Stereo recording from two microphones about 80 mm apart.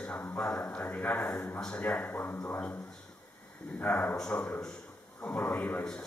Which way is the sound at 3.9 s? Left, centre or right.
Centre.